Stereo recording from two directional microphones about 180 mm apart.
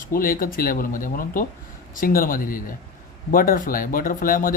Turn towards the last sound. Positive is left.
turn(degrees=50)  # may be behind; listen again after turning